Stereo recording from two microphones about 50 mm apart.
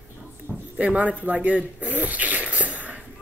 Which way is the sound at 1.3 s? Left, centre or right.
Right.